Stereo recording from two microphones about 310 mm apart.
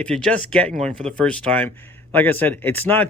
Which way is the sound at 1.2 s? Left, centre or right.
Centre.